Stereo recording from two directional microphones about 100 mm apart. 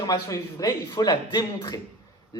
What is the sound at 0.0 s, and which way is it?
A man's voice, 40° left (ahead or behind).